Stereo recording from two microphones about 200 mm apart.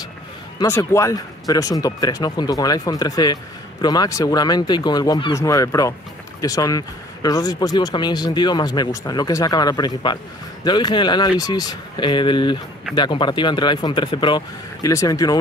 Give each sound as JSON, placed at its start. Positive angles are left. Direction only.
{"t": 0.6, "sound": "speech", "side_deg": 15}